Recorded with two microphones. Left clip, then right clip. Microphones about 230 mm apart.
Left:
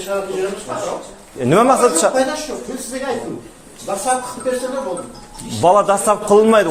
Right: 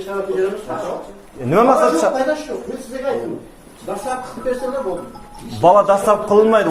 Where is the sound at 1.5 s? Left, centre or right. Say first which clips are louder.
Even; left.